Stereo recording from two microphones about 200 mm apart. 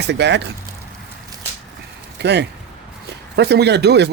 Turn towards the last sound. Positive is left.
turn(degrees=-55)  # may be behind; listen again after turning